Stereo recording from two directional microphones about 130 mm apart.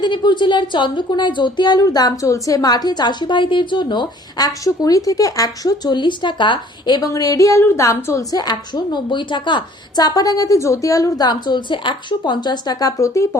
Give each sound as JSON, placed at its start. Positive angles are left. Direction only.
{"t": 0.0, "sound": "a woman's voice", "side_deg": 35}